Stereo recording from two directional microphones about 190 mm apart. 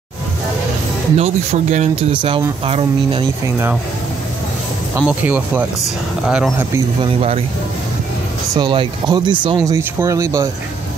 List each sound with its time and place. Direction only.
1.1 s speech: 35° right (ahead or behind)
5.0 s speech: 10° right (ahead or behind)
7.0 s speech: 30° right (ahead or behind)
8.5 s speech: 25° right (ahead or behind)